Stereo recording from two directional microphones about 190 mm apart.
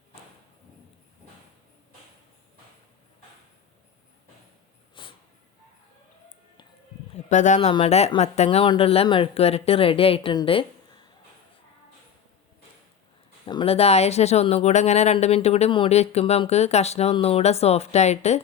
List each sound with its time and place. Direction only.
5.0 s a sound: 25° left (ahead or behind)
7.3 s speech: 40° left (ahead or behind)
13.4 s speech: 25° left (ahead or behind)